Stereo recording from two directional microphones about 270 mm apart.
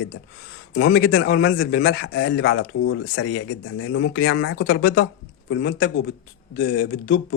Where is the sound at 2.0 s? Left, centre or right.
Left.